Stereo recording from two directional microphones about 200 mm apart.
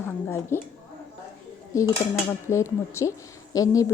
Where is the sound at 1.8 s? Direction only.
15° left (ahead or behind).